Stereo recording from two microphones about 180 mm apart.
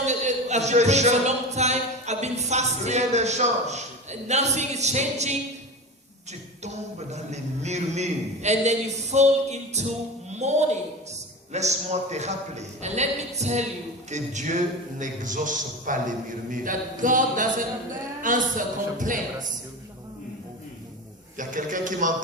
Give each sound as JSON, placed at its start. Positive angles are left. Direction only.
{"t": 0.0, "sound": "speech", "side_deg": -40}
{"t": 7.1, "sound": "a woman's voice", "side_deg": -40}
{"t": 21.3, "sound": "a man's voice", "side_deg": -45}